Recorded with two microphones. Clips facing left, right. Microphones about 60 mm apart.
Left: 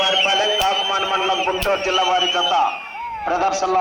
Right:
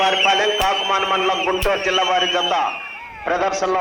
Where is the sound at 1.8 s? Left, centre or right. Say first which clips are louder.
Even; right.